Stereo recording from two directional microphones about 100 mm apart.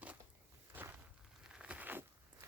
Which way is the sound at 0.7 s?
20° right (ahead or behind).